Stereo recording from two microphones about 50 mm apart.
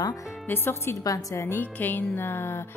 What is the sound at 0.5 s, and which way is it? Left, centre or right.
Speech, left.